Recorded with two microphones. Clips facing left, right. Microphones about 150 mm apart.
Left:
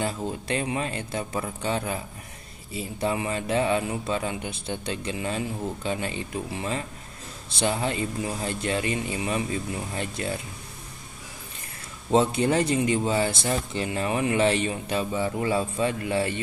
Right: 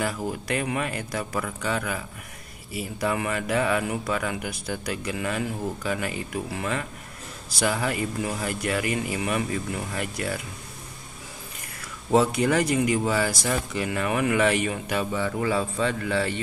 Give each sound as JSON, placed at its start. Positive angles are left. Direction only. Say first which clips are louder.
{"t": 0.3, "sound": "speech", "louder": "even", "side_deg": 25}
{"t": 12.1, "sound": "speech", "louder": "right 1 dB", "side_deg": 30}